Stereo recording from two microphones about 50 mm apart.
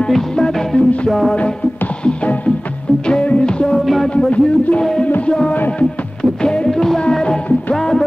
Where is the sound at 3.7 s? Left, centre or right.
Centre.